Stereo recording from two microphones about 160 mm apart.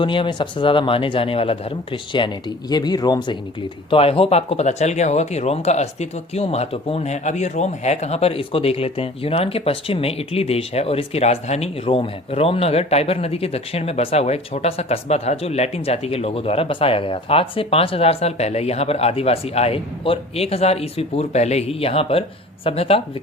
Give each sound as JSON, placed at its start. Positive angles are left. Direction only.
{"t": 0.0, "sound": "speech", "side_deg": 30}